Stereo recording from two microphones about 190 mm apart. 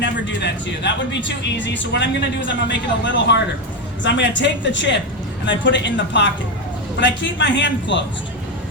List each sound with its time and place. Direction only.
0.0 s speech: 70° left (ahead or behind)